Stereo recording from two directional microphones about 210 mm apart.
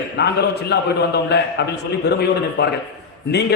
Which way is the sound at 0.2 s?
55° left (ahead or behind).